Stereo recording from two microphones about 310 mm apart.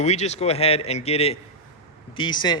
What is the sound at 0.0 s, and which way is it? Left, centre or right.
A man's voice, left.